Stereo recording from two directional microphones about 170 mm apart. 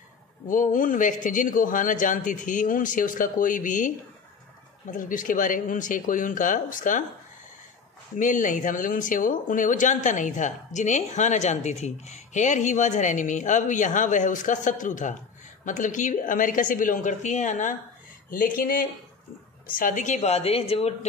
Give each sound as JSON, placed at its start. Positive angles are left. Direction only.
{"t": 0.5, "sound": "speech", "side_deg": 50}
{"t": 4.9, "sound": "speech", "side_deg": 50}
{"t": 8.2, "sound": "a woman's voice", "side_deg": 50}